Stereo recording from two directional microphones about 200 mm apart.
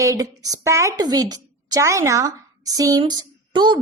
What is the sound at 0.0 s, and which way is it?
A woman's voice, 15° right (ahead or behind).